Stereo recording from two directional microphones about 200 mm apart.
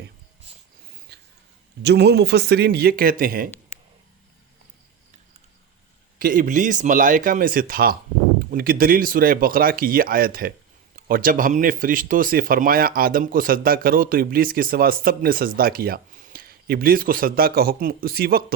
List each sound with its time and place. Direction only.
1.1 s a sound: 55° right (ahead or behind)
1.8 s speech: 55° right (ahead or behind)
6.1 s speech: 45° right (ahead or behind)